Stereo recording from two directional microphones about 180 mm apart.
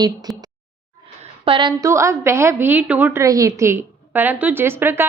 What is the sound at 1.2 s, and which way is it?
A woman's voice, 30° right (ahead or behind).